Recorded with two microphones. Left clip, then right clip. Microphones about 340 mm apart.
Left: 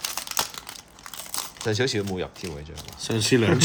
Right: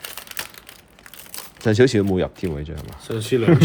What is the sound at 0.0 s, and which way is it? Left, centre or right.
Crumpling, centre.